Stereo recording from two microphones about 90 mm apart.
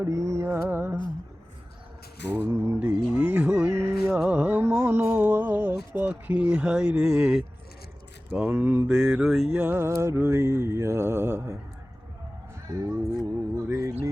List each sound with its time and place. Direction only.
0.0 s mantra: 35° right (ahead or behind)
2.5 s mantra: 30° right (ahead or behind)
2.8 s music: 15° right (ahead or behind)
4.2 s carnatic music: 15° right (ahead or behind)
4.8 s a sound: 25° right (ahead or behind)
6.0 s speech: 20° right (ahead or behind)
9.7 s mantra: 30° right (ahead or behind)
12.6 s speech: 35° right (ahead or behind)
13.6 s a sound: 30° right (ahead or behind)